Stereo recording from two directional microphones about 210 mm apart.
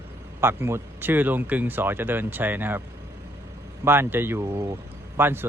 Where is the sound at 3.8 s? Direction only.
10° right (ahead or behind).